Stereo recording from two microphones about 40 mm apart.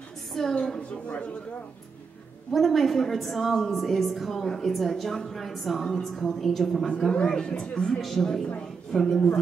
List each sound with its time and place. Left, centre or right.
0.3 s a sound: centre
0.7 s speech: left
2.5 s a woman's voice: centre
5.9 s a woman's voice: centre
7.2 s speech: centre
8.0 s a woman's voice: centre
8.9 s a woman's voice: centre